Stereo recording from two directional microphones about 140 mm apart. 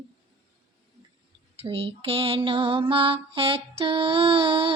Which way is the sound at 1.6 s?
45° right (ahead or behind).